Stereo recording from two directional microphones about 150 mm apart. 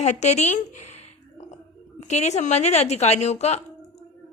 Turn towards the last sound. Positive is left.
turn(degrees=45)  # may be behind; listen again after turning